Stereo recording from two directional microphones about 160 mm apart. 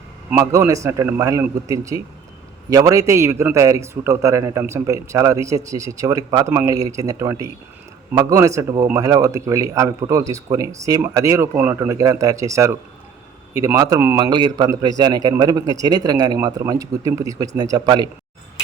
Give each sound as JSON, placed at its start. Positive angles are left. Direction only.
{"t": 0.3, "sound": "a man's voice", "side_deg": -15}